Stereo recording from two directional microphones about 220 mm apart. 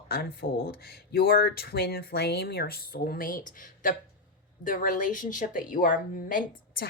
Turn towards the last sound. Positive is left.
turn(degrees=40)  # may be behind; listen again after turning